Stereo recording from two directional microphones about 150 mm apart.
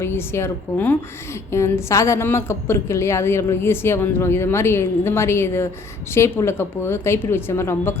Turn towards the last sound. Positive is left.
turn(degrees=15)  # may be behind; listen again after turning